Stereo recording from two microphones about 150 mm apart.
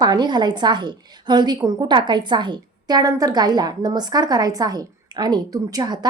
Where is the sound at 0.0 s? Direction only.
30° right (ahead or behind).